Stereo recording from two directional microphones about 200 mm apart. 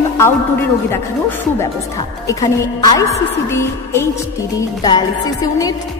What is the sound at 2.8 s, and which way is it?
A woman's voice, 15° left (ahead or behind).